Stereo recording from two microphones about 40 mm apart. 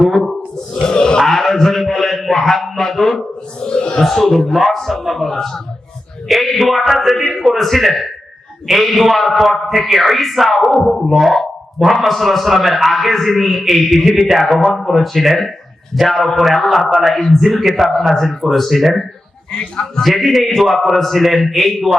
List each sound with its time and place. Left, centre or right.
0.0 s a man's voice: centre
0.7 s grunt: left
1.2 s a sound: centre
3.6 s speech: left
4.0 s a man's voice: centre
19.5 s speech: left
20.0 s a man's voice: centre